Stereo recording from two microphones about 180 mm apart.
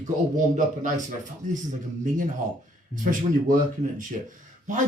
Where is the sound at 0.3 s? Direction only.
45° right (ahead or behind).